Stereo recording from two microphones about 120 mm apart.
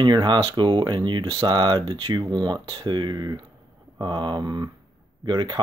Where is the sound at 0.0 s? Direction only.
40° right (ahead or behind).